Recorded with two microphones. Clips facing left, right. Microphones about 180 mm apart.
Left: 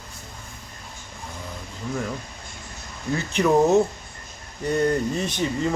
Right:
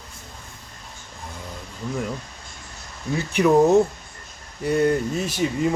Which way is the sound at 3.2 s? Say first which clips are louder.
Right 2 dB; 10° right (ahead or behind).